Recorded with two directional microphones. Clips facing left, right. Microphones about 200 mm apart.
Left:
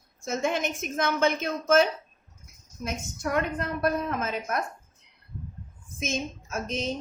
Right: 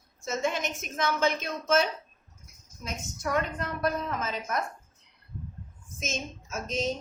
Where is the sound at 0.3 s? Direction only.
50° left (ahead or behind).